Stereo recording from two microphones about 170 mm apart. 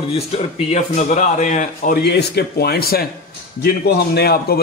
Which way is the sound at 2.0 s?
75° left (ahead or behind).